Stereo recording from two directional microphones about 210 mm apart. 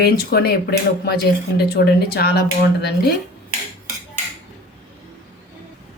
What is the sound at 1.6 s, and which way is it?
Speech, 50° left (ahead or behind).